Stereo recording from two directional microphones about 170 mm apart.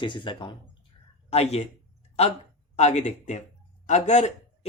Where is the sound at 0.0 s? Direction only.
30° left (ahead or behind).